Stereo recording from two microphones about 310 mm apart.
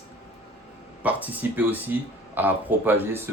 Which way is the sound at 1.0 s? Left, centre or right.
Centre.